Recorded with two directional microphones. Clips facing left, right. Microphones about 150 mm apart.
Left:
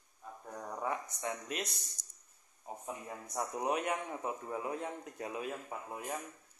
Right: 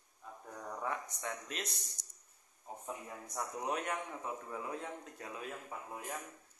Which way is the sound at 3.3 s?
15° left (ahead or behind).